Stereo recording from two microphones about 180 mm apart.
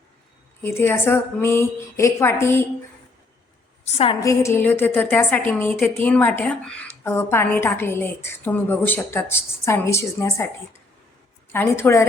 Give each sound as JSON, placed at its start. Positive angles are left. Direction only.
{"t": 0.6, "sound": "speech", "side_deg": 10}
{"t": 3.8, "sound": "a woman's voice", "side_deg": 35}
{"t": 4.2, "sound": "speech", "side_deg": 15}
{"t": 11.5, "sound": "speech", "side_deg": 10}